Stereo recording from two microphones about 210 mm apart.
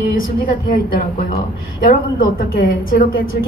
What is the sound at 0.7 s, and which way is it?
A woman's voice, 40° left (ahead or behind).